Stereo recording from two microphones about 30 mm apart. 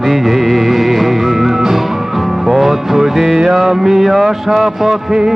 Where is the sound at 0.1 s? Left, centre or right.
Centre.